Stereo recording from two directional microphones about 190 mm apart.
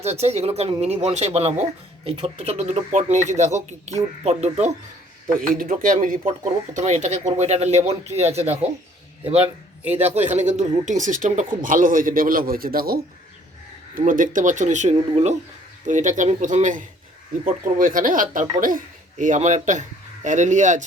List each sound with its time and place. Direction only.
0.0 s speech: 35° right (ahead or behind)
5.5 s speech: 45° right (ahead or behind)
9.8 s a man's voice: 10° right (ahead or behind)
10.2 s speech: 35° right (ahead or behind)